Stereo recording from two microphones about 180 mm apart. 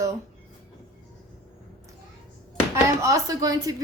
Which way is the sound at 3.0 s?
20° right (ahead or behind).